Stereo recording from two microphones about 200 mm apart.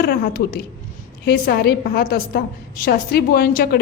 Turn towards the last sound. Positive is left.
turn(degrees=45)  # may be behind; listen again after turning